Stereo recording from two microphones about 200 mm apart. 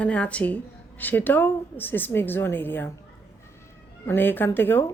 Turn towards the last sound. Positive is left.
turn(degrees=10)  # may be behind; listen again after turning